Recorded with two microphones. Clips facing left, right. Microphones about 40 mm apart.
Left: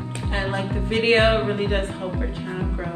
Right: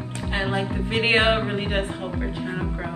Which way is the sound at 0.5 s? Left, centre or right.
Centre.